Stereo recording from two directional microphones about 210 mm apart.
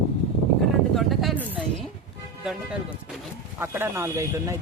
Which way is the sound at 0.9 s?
Centre (ahead or behind).